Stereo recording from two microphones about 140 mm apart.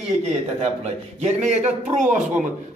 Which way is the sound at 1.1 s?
55° right (ahead or behind).